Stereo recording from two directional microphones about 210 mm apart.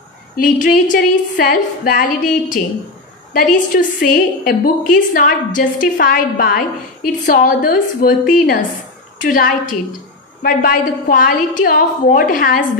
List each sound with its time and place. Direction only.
0.4 s a woman's voice: 40° left (ahead or behind)